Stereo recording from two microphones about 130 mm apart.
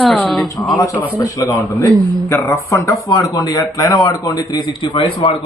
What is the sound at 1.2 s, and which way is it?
Speech, 25° left (ahead or behind).